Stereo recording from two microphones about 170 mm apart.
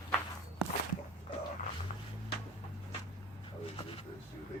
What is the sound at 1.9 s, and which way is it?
Music, 45° left (ahead or behind).